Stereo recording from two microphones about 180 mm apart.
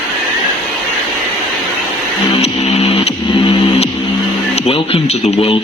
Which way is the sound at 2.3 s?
35° left (ahead or behind).